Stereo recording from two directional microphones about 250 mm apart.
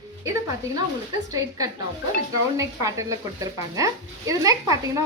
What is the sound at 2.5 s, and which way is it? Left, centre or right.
A woman's voice, centre.